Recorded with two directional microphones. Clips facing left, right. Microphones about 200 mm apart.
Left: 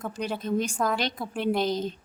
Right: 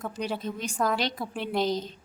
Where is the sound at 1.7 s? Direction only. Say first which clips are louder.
Left 2 dB; 55° left (ahead or behind).